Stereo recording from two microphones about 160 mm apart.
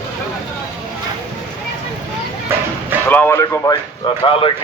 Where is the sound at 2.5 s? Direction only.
15° right (ahead or behind).